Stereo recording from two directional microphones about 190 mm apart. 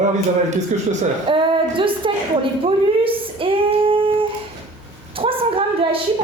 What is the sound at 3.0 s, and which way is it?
Female singing, 30° right (ahead or behind).